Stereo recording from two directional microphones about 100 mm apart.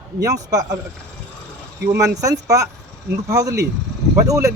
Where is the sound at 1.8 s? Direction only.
30° right (ahead or behind).